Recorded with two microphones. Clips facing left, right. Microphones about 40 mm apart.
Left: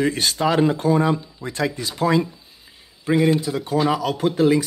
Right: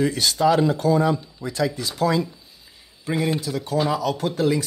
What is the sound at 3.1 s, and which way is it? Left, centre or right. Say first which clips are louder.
Speech: left 5 dB; centre.